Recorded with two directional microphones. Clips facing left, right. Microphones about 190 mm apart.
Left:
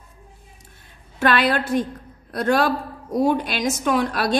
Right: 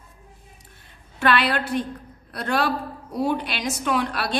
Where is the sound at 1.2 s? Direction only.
45° left (ahead or behind).